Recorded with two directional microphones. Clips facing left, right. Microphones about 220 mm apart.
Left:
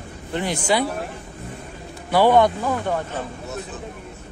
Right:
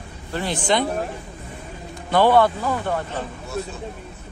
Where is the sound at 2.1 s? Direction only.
15° left (ahead or behind).